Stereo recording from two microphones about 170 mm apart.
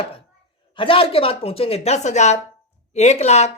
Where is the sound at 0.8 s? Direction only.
30° left (ahead or behind).